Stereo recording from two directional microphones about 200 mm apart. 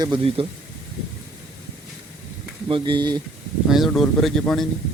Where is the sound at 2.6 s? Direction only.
25° right (ahead or behind).